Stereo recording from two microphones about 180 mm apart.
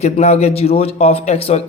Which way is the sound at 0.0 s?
35° left (ahead or behind).